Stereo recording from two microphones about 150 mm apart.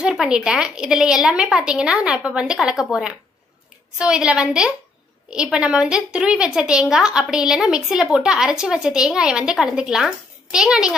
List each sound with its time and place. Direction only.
0.0 s a woman's voice: 5° right (ahead or behind)